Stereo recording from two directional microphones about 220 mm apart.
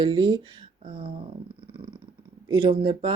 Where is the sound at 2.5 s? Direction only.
25° right (ahead or behind).